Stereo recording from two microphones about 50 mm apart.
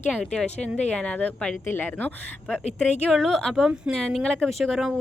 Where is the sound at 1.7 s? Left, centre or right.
Left.